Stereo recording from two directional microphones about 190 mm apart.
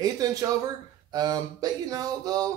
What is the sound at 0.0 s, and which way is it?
Speech, 20° right (ahead or behind).